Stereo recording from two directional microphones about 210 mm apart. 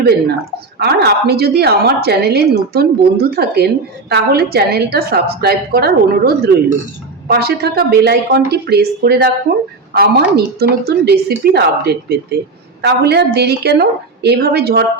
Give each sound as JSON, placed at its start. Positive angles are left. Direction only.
{"t": 0.8, "sound": "a woman's voice", "side_deg": -50}